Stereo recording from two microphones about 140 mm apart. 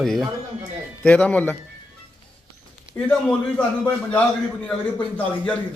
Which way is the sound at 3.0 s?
15° left (ahead or behind).